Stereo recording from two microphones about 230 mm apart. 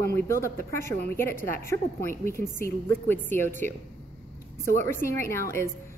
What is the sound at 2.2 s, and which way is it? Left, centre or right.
A woman's voice, centre.